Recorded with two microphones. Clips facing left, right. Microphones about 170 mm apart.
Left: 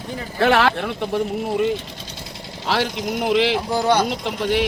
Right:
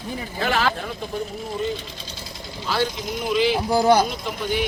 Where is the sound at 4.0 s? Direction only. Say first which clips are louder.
Left 2 dB; 80° left.